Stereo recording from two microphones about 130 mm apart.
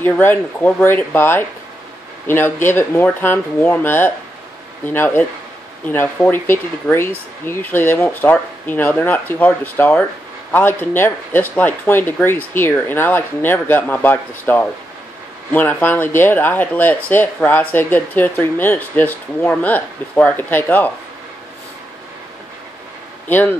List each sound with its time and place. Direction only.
0.0 s speech: 15° left (ahead or behind)
23.2 s speech: 15° left (ahead or behind)